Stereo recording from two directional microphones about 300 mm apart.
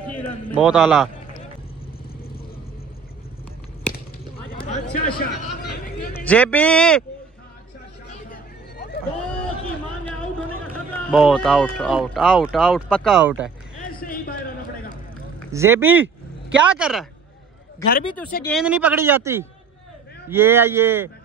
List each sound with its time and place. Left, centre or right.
0.6 s speech: centre
5.0 s a sound: left
6.2 s speech: centre
8.1 s a sound: left
11.1 s speech: centre
13.7 s a sound: left
15.5 s speech: centre
17.8 s a man's voice: centre
18.4 s speech: centre